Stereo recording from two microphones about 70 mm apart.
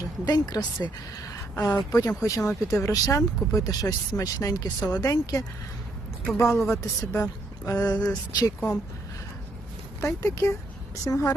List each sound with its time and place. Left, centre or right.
0.0 s a woman's voice: left
7.9 s speech: left
10.0 s speech: left